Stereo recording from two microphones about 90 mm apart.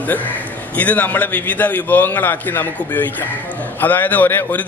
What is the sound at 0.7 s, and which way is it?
A man's voice, 20° left (ahead or behind).